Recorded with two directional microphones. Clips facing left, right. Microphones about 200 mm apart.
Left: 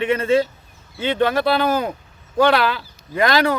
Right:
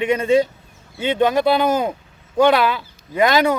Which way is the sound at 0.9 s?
20° right (ahead or behind).